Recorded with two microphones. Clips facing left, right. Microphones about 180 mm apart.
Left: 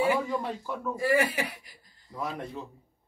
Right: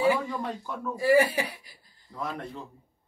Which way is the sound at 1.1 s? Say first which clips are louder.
Right 5 dB; 30° right (ahead or behind).